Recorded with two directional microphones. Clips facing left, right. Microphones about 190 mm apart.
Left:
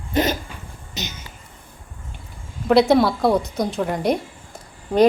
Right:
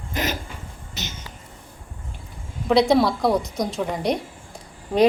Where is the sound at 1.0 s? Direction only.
15° left (ahead or behind).